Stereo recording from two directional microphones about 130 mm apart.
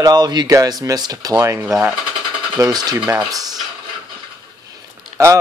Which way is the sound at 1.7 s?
5° right (ahead or behind).